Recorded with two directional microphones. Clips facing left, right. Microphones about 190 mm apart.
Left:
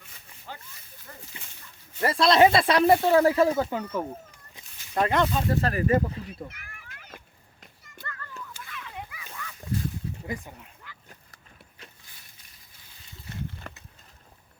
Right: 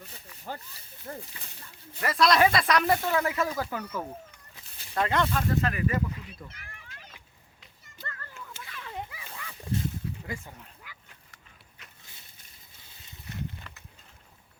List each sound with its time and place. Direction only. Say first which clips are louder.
0.0 s snake: right 5 dB; 40° right (ahead or behind)
1.1 s speech: right 9 dB; 45° right (ahead or behind)
2.0 s speech: left 4 dB; 30° left (ahead or behind)
6.5 s children playing: left 1 dB; 25° right (ahead or behind)
8.0 s a sound: left 2 dB; 30° right (ahead or behind)
10.2 s speech: left 4 dB; 15° left (ahead or behind)
10.8 s dog: left 2 dB; 10° right (ahead or behind)
13.7 s a sound: left 7 dB; 50° left (ahead or behind)